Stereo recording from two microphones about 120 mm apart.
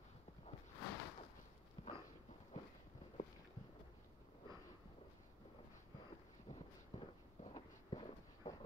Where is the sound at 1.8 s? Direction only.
50° left (ahead or behind).